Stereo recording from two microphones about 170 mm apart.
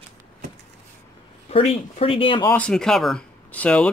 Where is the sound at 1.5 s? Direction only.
35° left (ahead or behind).